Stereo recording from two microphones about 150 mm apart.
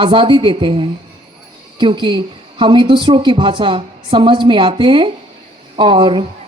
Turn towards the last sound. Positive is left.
turn(degrees=-35)  # may be behind; listen again after turning